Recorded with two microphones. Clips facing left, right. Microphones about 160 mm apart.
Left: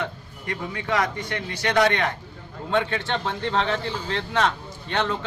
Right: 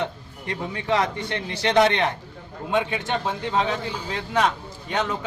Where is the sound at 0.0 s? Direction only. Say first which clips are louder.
Right 2 dB; 25° right (ahead or behind).